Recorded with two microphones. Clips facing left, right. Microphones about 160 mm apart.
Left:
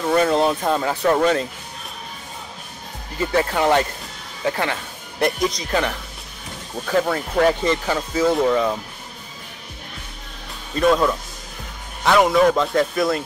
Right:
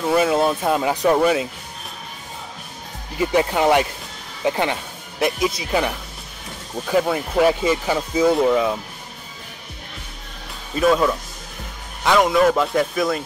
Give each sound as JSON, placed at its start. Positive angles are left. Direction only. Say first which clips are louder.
{"t": 0.0, "sound": "speech", "louder": "even", "side_deg": -5}
{"t": 3.2, "sound": "speech", "louder": "right 2 dB", "side_deg": -15}
{"t": 5.2, "sound": "speech", "louder": "even", "side_deg": -5}
{"t": 10.7, "sound": "speech", "louder": "even", "side_deg": -5}